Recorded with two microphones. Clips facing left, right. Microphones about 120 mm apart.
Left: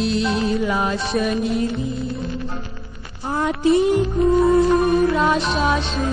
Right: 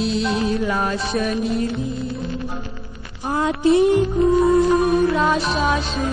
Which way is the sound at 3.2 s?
15° right (ahead or behind).